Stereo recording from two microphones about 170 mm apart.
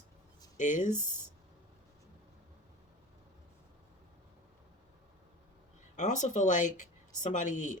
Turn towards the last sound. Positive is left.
turn(degrees=45)  # may be behind; listen again after turning